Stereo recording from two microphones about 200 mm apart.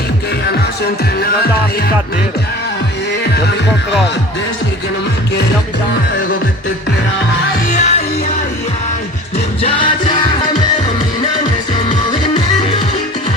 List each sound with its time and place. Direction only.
7.7 s music: 35° left (ahead or behind)
9.6 s music: 25° left (ahead or behind)